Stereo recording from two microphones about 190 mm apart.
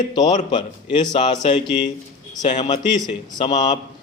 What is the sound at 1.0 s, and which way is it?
Speech, 25° left (ahead or behind).